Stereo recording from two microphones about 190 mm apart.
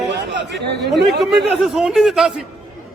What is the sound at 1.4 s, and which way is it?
Speech, centre (ahead or behind).